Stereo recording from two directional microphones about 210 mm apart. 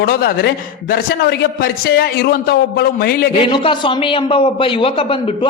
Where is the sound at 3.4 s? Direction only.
25° left (ahead or behind).